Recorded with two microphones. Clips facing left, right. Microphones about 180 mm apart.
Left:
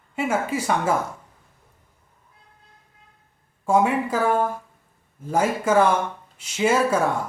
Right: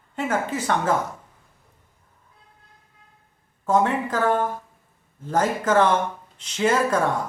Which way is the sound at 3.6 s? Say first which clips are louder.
Left 1 dB; 10° left (ahead or behind).